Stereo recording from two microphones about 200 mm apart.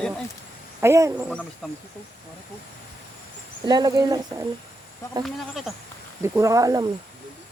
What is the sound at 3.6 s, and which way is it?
Speech, 20° right (ahead or behind).